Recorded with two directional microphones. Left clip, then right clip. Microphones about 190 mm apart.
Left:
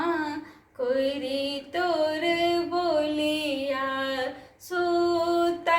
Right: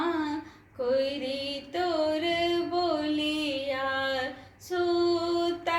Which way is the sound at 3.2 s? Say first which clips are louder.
Left 3 dB; 15° left (ahead or behind).